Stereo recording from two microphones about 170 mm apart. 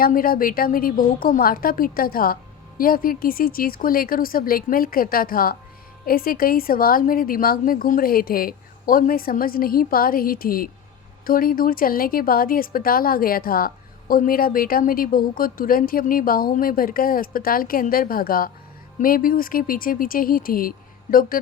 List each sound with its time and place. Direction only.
0.0 s a woman's voice: 55° left (ahead or behind)